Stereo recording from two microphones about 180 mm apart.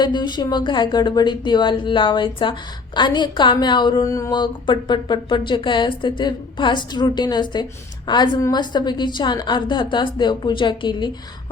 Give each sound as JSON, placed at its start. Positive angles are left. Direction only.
{"t": 0.0, "sound": "a woman's voice", "side_deg": 25}